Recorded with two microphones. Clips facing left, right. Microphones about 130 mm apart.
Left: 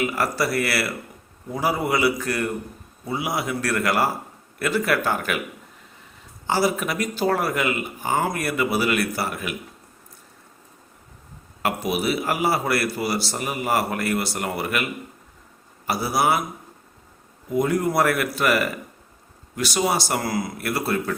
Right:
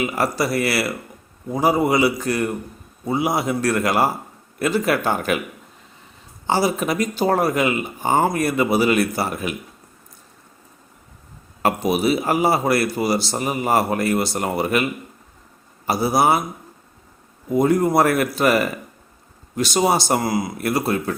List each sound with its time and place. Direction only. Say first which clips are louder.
0.0 s speech: right 2 dB; 20° right (ahead or behind)
6.5 s speech: right 2 dB; 25° right (ahead or behind)
11.6 s speech: right 5 dB; 25° right (ahead or behind)
15.9 s speech: right 4 dB; 20° right (ahead or behind)
17.5 s speech: right 5 dB; 25° right (ahead or behind)